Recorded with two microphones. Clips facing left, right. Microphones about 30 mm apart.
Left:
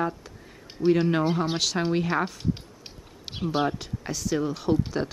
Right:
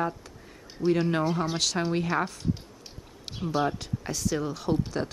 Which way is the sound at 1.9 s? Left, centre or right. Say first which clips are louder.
Left 2 dB; centre.